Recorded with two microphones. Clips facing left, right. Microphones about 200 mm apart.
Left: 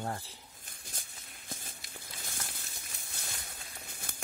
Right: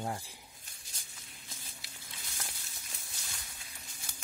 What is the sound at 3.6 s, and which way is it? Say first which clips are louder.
Crumpling: left 5 dB; 55° left (ahead or behind).